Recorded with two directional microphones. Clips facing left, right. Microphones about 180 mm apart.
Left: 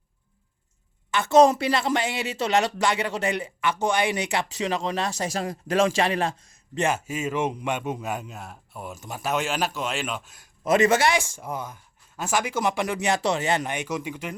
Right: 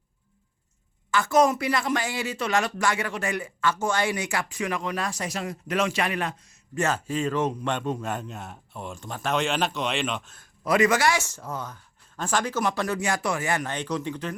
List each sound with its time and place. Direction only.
1.1 s speech: 25° left (ahead or behind)
5.1 s speech: 35° left (ahead or behind)
6.7 s a man's voice: 15° left (ahead or behind)
10.6 s speech: 25° left (ahead or behind)
11.2 s a man's voice: 10° left (ahead or behind)
13.7 s a man's voice: 10° left (ahead or behind)